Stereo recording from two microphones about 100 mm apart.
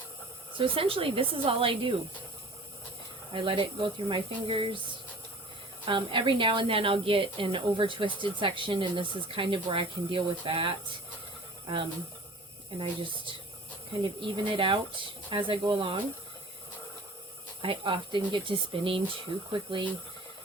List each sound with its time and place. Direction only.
0.5 s a woman's voice: 65° right (ahead or behind)
3.3 s a woman's voice: 60° right (ahead or behind)
12.8 s a woman's voice: 55° right (ahead or behind)
17.6 s a woman's voice: 60° right (ahead or behind)